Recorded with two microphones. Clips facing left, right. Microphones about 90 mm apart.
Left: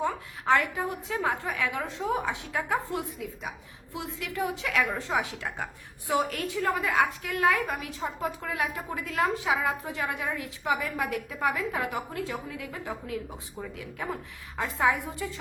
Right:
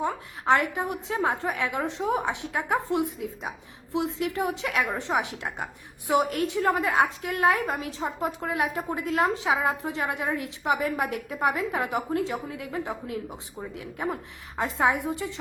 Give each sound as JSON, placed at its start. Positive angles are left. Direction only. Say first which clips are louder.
{"t": 0.0, "sound": "a woman's voice", "louder": "right 1 dB", "side_deg": -20}